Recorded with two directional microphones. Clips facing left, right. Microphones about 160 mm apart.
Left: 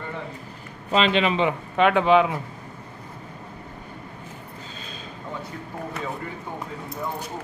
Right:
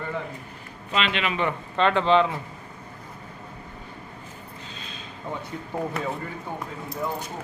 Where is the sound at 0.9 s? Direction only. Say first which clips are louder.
Left 6 dB; 35° left (ahead or behind).